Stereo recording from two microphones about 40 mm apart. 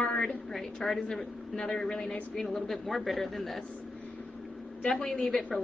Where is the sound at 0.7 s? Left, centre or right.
Centre.